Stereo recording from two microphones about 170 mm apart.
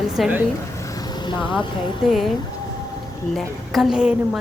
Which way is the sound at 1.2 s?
30° left (ahead or behind).